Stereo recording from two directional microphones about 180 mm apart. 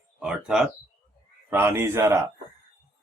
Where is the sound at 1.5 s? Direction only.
15° right (ahead or behind).